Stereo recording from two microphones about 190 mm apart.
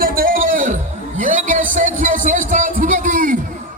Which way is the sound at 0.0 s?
50° right (ahead or behind).